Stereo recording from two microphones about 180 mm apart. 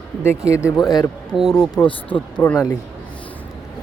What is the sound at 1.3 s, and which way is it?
Speech, centre (ahead or behind).